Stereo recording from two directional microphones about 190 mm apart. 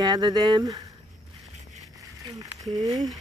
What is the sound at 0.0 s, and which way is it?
Speech, 20° right (ahead or behind).